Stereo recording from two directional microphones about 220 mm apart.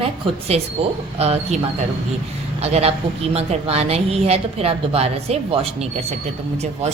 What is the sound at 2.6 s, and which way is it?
A woman's voice, 30° right (ahead or behind).